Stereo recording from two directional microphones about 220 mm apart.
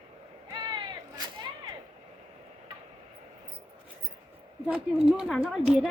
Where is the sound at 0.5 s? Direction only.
20° right (ahead or behind).